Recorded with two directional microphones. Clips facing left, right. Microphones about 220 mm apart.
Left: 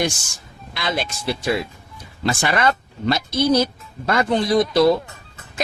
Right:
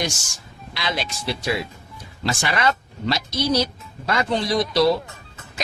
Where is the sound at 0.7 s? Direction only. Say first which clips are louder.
Left 3 dB; 50° left (ahead or behind).